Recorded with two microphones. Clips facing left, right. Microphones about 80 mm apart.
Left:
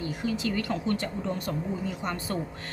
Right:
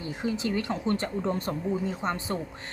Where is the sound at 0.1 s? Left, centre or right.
Right.